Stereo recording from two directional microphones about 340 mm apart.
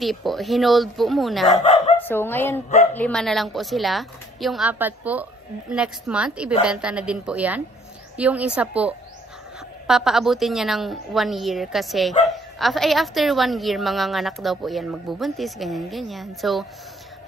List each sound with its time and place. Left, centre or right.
0.0 s a woman's voice: centre
1.6 s bow-wow: centre
2.0 s a woman's voice: centre